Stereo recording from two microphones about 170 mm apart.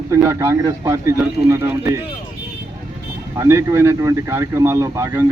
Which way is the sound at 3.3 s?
15° right (ahead or behind).